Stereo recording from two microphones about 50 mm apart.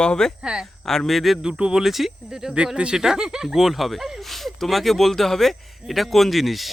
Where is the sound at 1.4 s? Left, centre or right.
Centre.